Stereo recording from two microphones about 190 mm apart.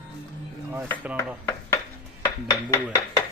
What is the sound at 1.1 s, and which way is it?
Chopping, 15° left (ahead or behind).